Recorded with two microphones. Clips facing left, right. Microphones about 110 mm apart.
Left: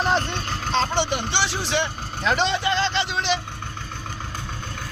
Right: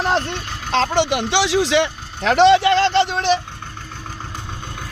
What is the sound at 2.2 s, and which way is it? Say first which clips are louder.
Speech: right 10 dB; 70° right (ahead or behind).